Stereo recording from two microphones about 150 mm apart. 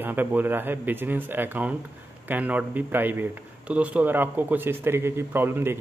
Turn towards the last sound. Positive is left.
turn(degrees=-15)  # may be behind; listen again after turning